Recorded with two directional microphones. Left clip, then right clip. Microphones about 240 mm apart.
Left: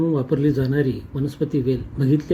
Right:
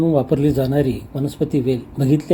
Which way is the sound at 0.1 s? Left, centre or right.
Centre.